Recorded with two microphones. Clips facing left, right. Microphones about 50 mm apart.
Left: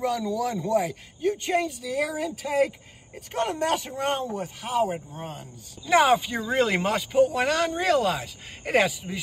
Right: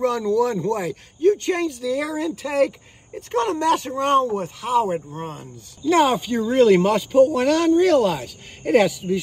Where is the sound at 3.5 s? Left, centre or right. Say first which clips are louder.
Right 6 dB; right.